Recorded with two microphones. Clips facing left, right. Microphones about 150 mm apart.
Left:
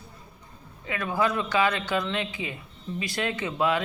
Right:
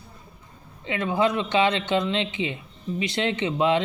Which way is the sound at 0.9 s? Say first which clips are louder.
Right 3 dB; 20° right (ahead or behind).